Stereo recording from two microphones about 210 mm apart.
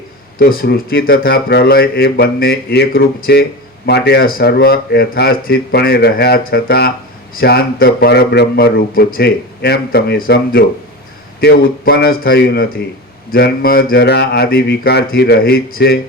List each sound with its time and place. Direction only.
0.3 s a man's voice: 45° left (ahead or behind)